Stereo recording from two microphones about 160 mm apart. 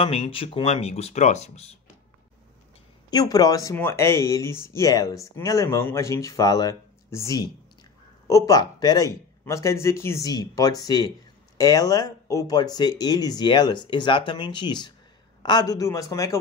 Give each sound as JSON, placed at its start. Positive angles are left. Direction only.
{"t": 0.0, "sound": "speech", "side_deg": 35}
{"t": 3.1, "sound": "speech", "side_deg": 25}